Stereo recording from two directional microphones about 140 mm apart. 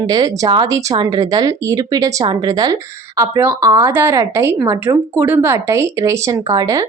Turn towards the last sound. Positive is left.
turn(degrees=-30)  # may be behind; listen again after turning